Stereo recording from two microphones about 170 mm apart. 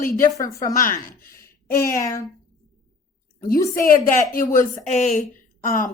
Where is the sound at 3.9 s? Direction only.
55° left (ahead or behind).